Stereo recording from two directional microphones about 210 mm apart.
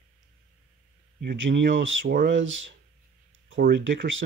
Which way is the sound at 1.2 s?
60° right (ahead or behind).